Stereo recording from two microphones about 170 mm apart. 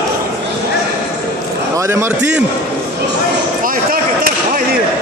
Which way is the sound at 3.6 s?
55° right (ahead or behind).